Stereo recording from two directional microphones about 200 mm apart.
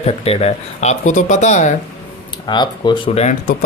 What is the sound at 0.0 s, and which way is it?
Speech, 30° left (ahead or behind).